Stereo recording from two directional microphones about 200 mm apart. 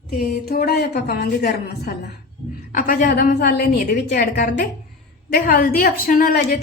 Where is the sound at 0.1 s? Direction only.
50° left (ahead or behind).